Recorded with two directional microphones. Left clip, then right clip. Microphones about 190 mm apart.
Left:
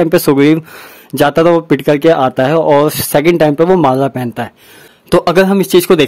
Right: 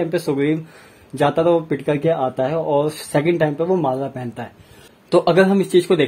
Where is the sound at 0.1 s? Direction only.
40° left (ahead or behind).